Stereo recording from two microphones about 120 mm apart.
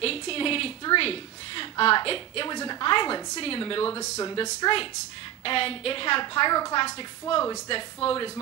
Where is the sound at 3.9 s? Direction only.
25° left (ahead or behind).